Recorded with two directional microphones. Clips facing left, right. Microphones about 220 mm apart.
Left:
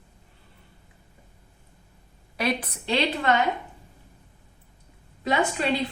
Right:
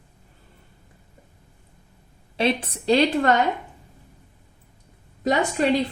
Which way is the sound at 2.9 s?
45° right (ahead or behind).